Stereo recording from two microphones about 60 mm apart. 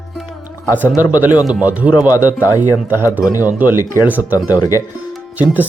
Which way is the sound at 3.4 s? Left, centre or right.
Right.